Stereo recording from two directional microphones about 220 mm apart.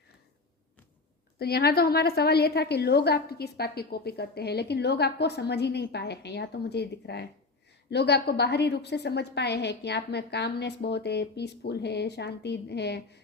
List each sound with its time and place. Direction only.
1.4 s a woman's voice: 45° left (ahead or behind)